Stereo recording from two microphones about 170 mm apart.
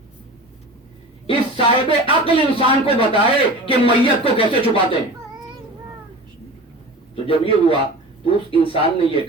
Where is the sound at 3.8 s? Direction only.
30° left (ahead or behind).